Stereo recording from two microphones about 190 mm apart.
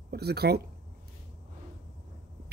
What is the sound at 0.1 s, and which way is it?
Speech, 60° right (ahead or behind).